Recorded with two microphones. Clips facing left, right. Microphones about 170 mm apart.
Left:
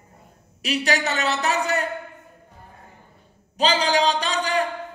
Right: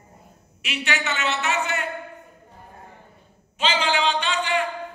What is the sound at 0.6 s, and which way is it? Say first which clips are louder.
A man's voice: left 5 dB; 35° left (ahead or behind).